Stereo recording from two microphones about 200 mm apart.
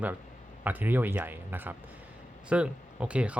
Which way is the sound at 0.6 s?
10° right (ahead or behind).